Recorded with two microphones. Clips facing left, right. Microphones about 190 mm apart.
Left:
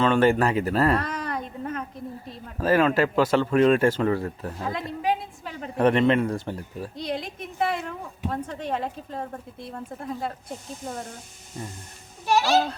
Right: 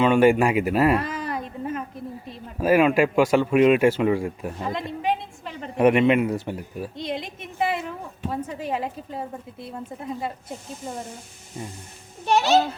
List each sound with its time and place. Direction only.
0.0 s a woman's voice: 10° right (ahead or behind)
4.7 s a sound: centre (ahead or behind)
5.7 s a woman's voice: 10° right (ahead or behind)
12.2 s a child's voice: 25° right (ahead or behind)